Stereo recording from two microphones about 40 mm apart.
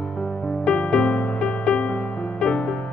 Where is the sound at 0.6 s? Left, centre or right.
Left.